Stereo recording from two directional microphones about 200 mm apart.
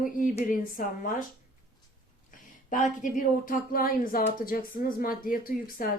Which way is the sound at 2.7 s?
40° left (ahead or behind).